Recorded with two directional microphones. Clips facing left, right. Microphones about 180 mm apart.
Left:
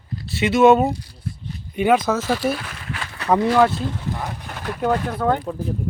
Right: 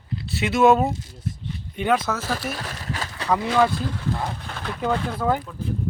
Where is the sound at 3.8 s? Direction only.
20° left (ahead or behind).